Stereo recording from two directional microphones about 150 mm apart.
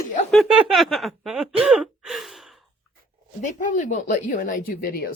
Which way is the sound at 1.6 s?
5° right (ahead or behind).